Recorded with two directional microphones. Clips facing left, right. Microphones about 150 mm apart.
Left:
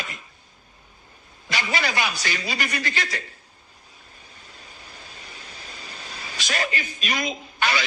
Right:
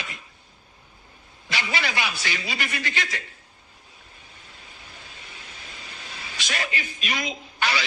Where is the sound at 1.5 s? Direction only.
45° left (ahead or behind).